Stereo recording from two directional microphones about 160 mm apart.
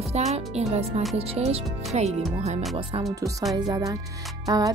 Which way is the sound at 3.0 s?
20° right (ahead or behind).